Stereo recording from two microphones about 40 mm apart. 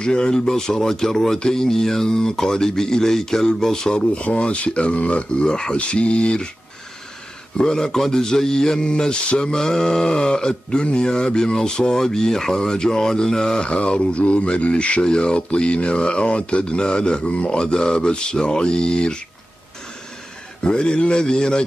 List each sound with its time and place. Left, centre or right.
0.0 s speech: left
4.1 s speech: left
5.5 s speech: centre
5.8 s speech: left
7.5 s speech: centre
12.0 s speech: centre
13.7 s speech: left
20.6 s speech: left